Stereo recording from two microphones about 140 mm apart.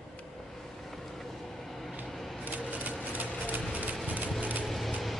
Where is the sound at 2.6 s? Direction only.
10° right (ahead or behind).